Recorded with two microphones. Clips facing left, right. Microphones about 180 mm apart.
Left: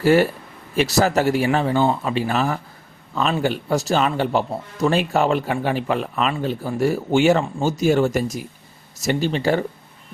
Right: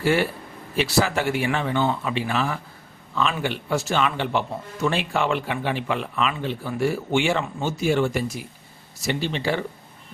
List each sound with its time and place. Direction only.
0.0 s speech: 40° left (ahead or behind)